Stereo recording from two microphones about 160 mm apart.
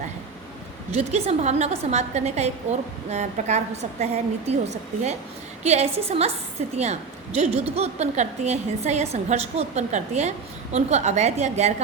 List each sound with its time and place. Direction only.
0.9 s a woman's voice: 40° right (ahead or behind)
5.6 s a woman's voice: 40° right (ahead or behind)